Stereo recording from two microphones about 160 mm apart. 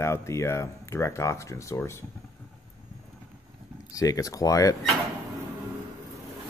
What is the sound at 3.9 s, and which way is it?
Speech, 20° left (ahead or behind).